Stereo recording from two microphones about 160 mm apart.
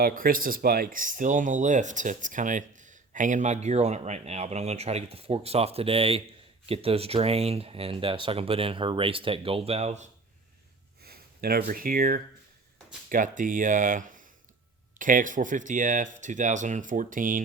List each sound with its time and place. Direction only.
0.0 s speech: 60° right (ahead or behind); by 10.1 s 45° right (ahead or behind)
11.0 s speech: 75° right (ahead or behind); by 17.4 s 55° right (ahead or behind)